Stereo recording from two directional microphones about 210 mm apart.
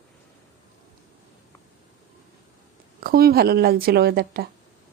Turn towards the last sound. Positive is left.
turn(degrees=-45)  # may be behind; listen again after turning